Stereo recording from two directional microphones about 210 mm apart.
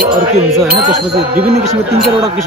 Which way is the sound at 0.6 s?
50° right (ahead or behind).